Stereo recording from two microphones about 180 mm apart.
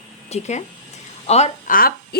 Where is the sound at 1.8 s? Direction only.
55° left (ahead or behind).